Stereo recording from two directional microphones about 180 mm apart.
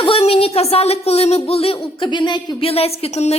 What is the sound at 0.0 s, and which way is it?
A woman's voice, 30° left (ahead or behind).